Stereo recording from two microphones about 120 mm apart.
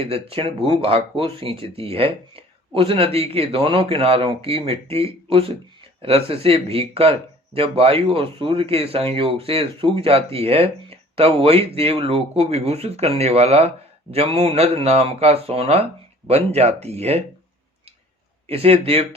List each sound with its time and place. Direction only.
0.0 s speech: 50° right (ahead or behind)
18.4 s speech: 55° right (ahead or behind)